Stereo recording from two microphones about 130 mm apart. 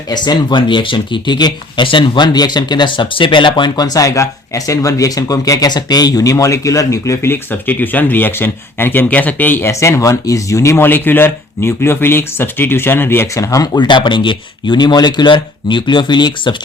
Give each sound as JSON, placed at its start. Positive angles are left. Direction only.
{"t": 0.1, "sound": "speech", "side_deg": 35}